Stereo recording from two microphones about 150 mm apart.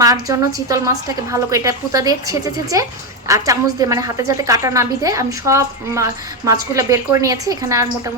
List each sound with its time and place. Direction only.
0.0 s a woman's voice: 25° right (ahead or behind)